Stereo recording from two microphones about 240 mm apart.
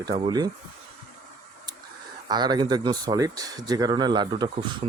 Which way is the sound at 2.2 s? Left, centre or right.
Centre.